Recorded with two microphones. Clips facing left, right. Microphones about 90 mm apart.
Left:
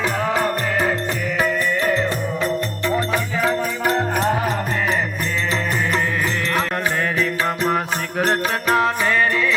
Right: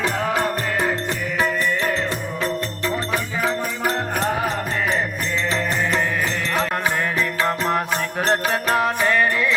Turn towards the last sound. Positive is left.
turn(degrees=5)  # may be behind; listen again after turning